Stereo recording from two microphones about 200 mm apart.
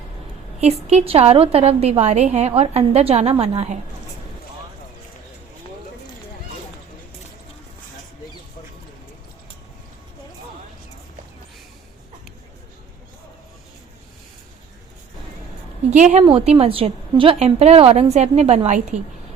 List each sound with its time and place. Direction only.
0.6 s a woman's voice: 30° right (ahead or behind)
15.9 s a woman's voice: 35° right (ahead or behind)